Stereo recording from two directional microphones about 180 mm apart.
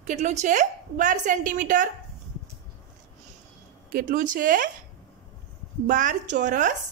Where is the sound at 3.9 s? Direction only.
50° right (ahead or behind).